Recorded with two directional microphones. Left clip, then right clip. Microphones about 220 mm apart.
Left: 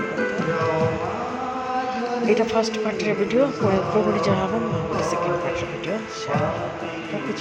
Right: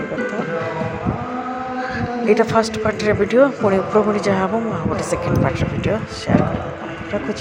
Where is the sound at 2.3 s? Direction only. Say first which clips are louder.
Right 6 dB; 20° right (ahead or behind).